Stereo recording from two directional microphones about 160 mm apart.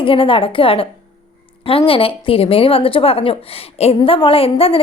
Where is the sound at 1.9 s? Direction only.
35° left (ahead or behind).